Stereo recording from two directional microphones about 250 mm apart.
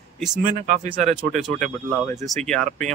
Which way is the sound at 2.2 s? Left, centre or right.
Centre.